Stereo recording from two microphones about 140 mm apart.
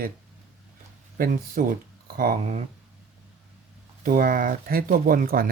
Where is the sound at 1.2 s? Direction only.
90° right.